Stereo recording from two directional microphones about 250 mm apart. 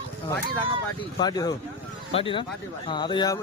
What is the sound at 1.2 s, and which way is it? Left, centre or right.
Speech, centre.